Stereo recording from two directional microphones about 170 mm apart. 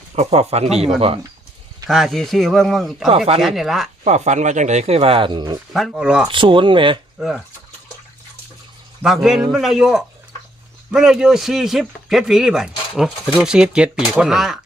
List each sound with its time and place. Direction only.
0.2 s speech: 40° right (ahead or behind)
1.9 s speech: centre (ahead or behind)
4.0 s speech: 40° right (ahead or behind); by 5.5 s 25° right (ahead or behind)
5.7 s speech: centre (ahead or behind)
6.2 s speech: 30° right (ahead or behind)
7.2 s speech: centre (ahead or behind)
9.0 s speech: 5° right (ahead or behind)